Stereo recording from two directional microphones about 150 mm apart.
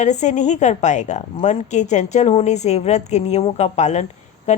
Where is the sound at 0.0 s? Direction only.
50° left (ahead or behind).